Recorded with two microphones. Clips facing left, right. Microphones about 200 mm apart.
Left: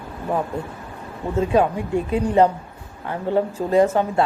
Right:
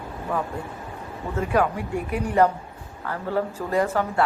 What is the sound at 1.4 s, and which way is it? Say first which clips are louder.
Speech: left 4 dB; 25° left (ahead or behind).